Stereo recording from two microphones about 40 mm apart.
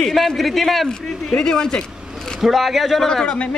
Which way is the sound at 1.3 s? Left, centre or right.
Centre.